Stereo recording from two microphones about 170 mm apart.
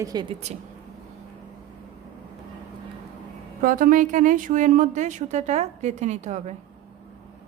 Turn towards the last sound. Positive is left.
turn(degrees=-45)  # may be behind; listen again after turning